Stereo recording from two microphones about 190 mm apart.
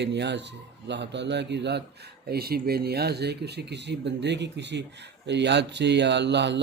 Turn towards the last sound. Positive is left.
turn(degrees=-65)  # may be behind; listen again after turning